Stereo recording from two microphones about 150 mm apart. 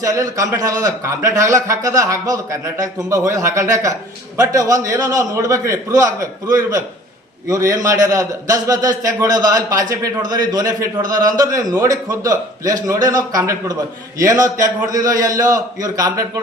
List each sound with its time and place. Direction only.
0.0 s a man's voice: 20° right (ahead or behind)